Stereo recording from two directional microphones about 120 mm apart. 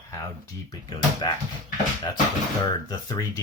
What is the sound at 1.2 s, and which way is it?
Speech, 35° left (ahead or behind).